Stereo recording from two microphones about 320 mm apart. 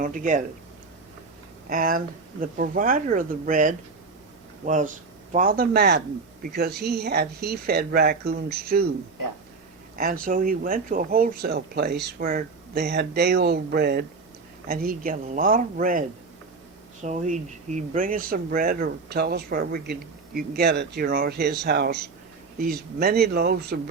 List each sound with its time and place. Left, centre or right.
0.0 s speech: right
1.7 s speech: right
9.9 s speech: right